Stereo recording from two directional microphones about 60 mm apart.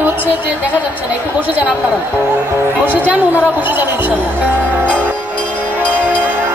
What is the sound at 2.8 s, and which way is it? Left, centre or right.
Speech, right.